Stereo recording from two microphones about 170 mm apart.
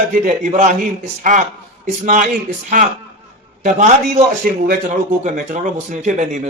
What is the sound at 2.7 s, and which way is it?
A man's voice, 50° right (ahead or behind).